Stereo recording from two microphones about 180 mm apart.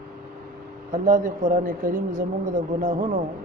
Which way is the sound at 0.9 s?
50° right (ahead or behind).